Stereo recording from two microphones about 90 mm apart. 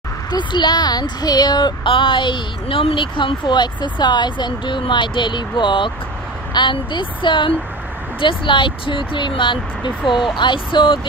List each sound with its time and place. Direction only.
0.3 s speech: 55° left (ahead or behind)
1.9 s speech: 70° left (ahead or behind)